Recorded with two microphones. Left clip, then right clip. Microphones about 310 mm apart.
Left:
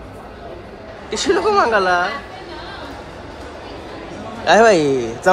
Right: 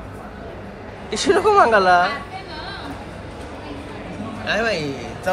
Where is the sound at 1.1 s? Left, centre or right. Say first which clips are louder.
Even; centre.